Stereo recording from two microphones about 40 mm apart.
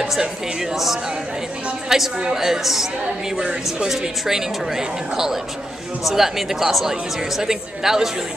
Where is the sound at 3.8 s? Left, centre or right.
Centre.